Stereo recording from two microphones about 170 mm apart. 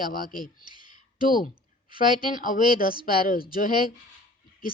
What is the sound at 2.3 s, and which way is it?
Speech, 50° left (ahead or behind).